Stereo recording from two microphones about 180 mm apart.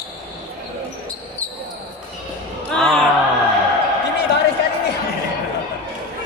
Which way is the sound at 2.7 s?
Centre (ahead or behind).